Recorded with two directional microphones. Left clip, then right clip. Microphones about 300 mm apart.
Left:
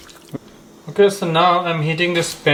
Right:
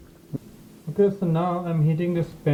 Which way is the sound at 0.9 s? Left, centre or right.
Centre.